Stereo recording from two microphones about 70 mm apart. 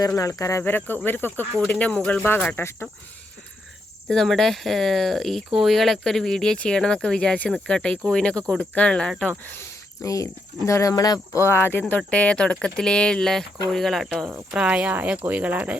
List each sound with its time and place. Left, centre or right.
0.2 s speech: left
0.6 s speech: left
1.6 s speech: centre
2.6 s speech: left
4.1 s speech: centre
10.0 s speech: left
11.3 s speech: left
12.1 s speech: centre
14.5 s speech: centre